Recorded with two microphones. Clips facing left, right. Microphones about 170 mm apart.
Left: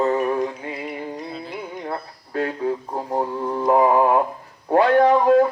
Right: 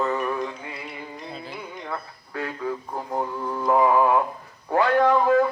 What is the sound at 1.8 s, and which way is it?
Speech, 35° left (ahead or behind).